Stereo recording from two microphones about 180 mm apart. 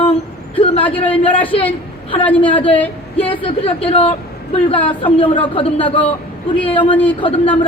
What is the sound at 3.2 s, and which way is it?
Speech, 30° left (ahead or behind).